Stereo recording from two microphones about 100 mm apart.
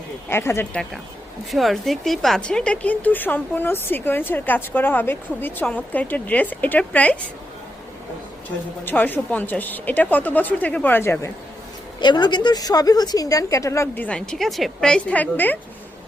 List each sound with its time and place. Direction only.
0.3 s speech: 25° left (ahead or behind)
1.5 s a woman's voice: centre (ahead or behind)
8.8 s a woman's voice: 20° left (ahead or behind)
11.9 s a woman's voice: 45° left (ahead or behind); by 13.8 s 30° left (ahead or behind)
13.9 s a woman's voice: 15° left (ahead or behind)
14.2 s a woman's voice: 5° left (ahead or behind)